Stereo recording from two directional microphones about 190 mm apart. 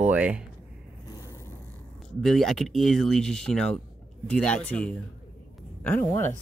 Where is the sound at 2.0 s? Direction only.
Centre (ahead or behind).